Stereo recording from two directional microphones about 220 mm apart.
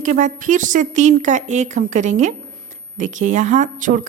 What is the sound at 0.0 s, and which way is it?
A woman's voice, 35° right (ahead or behind).